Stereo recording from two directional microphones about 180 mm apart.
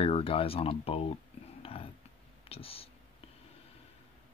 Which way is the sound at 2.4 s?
35° left (ahead or behind).